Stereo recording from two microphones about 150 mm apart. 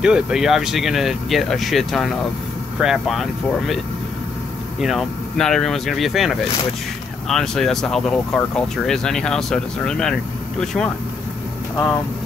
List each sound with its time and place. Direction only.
0.0 s speech: 5° right (ahead or behind)